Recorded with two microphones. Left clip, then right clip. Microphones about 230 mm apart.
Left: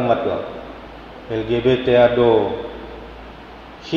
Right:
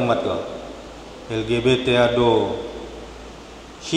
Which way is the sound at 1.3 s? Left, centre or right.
Right.